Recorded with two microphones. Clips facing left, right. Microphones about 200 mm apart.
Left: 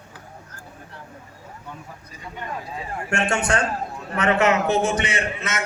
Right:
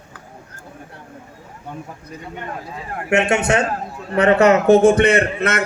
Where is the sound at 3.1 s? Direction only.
20° right (ahead or behind).